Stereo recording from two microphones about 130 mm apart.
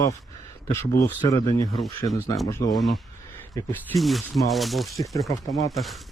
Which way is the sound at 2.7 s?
Centre (ahead or behind).